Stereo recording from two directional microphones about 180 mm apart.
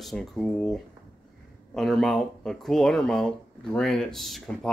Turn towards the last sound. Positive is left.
turn(degrees=0)  # may be behind; listen again after turning